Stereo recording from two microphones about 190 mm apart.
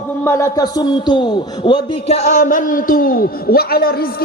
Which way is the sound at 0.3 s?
15° left (ahead or behind).